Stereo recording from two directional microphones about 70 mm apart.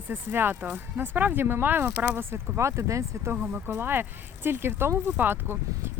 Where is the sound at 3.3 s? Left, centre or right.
Right.